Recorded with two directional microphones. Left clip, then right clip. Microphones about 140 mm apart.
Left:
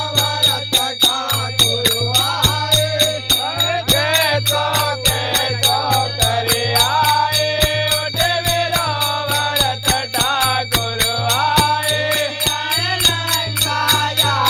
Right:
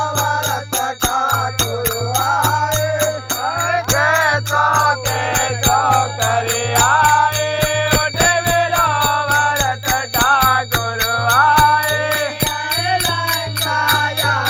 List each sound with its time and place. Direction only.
5.7 s music: 15° left (ahead or behind)
8.3 s music: 20° left (ahead or behind)
10.2 s music: 20° left (ahead or behind)
13.9 s music: 20° left (ahead or behind)